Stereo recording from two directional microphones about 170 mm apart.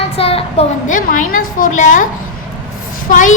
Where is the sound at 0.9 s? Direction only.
50° left (ahead or behind).